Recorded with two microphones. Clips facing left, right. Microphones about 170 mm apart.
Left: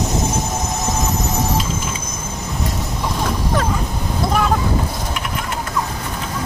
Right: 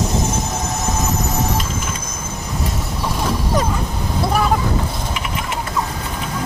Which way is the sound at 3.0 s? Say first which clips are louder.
Right 1 dB; 5° right (ahead or behind).